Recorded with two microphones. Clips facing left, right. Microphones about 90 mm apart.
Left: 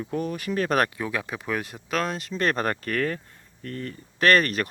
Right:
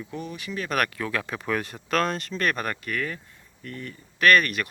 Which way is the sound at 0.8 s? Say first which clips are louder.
Even; 15° left (ahead or behind).